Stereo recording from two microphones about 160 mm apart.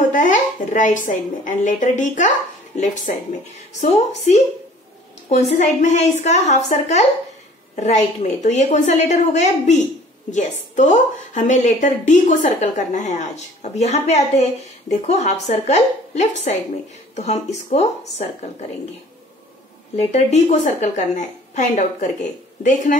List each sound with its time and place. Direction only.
0.1 s a woman's voice: 50° left (ahead or behind)
20.0 s a woman's voice: 45° left (ahead or behind)